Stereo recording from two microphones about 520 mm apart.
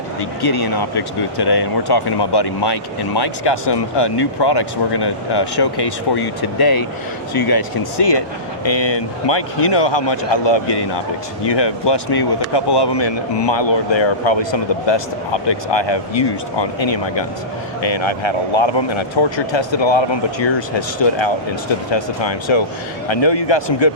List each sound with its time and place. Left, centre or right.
0.4 s speech: left